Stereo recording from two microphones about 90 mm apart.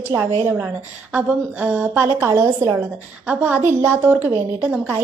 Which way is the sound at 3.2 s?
20° right (ahead or behind).